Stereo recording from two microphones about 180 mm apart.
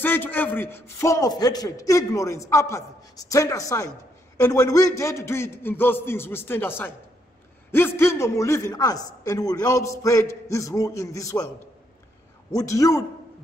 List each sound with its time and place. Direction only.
0.0 s speech: 10° left (ahead or behind)
12.4 s speech: 15° left (ahead or behind)